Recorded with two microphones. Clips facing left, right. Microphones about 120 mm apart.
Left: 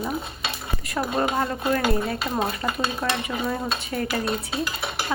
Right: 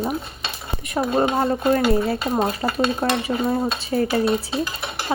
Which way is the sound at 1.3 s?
30° right (ahead or behind).